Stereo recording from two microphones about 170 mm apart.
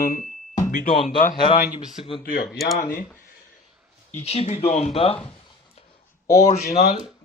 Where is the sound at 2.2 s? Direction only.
60° left (ahead or behind).